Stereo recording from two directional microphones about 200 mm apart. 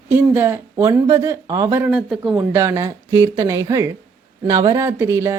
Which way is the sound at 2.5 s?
15° right (ahead or behind).